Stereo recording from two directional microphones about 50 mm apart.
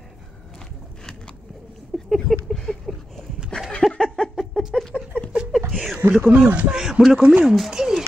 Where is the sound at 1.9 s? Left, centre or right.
Centre.